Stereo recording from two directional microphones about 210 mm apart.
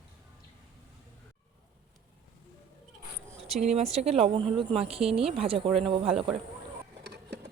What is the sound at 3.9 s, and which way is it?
Speech, 30° right (ahead or behind).